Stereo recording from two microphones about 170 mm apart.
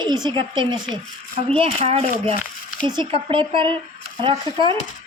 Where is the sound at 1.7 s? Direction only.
40° right (ahead or behind).